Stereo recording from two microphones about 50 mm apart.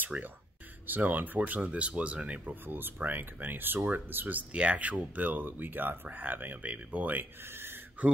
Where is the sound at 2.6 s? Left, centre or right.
Right.